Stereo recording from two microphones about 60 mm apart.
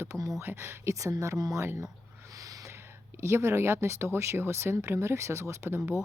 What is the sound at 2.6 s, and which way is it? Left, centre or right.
Speech, right.